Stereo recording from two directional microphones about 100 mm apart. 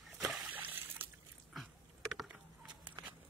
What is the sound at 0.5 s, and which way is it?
Water, 20° right (ahead or behind).